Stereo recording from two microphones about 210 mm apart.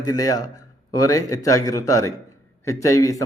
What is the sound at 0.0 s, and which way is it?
A man's voice, 15° left (ahead or behind).